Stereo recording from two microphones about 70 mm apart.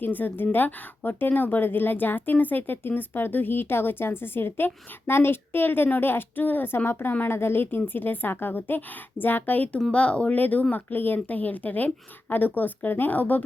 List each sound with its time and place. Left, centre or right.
0.0 s a woman's voice: left